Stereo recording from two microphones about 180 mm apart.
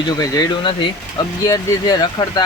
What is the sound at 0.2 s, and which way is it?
Speech, 20° left (ahead or behind).